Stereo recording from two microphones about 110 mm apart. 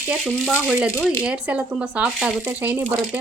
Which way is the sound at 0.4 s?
5° right (ahead or behind).